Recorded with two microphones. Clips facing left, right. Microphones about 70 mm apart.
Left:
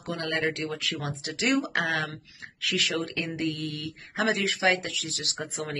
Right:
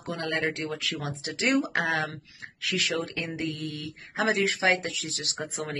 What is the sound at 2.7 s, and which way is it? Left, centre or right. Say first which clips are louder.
Speech: even; right.